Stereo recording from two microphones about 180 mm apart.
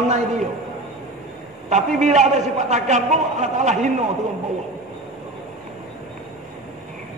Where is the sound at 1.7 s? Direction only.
40° right (ahead or behind).